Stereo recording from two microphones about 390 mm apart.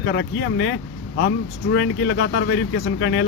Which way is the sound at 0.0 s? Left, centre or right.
Left.